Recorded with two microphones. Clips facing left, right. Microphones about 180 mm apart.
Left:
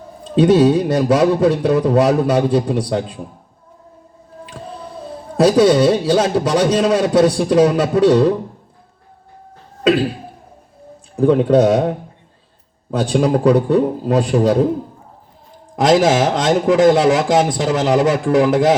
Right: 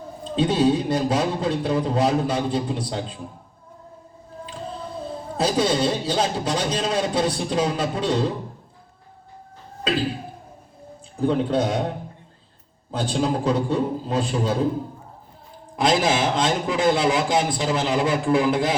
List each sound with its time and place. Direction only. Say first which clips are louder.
0.3 s a man's voice: left 8 dB; 75° left (ahead or behind)
5.4 s a man's voice: left 10 dB; 75° left (ahead or behind)
11.2 s a man's voice: left 9 dB; 70° left (ahead or behind)
15.7 s a man's voice: left 7 dB; 90° left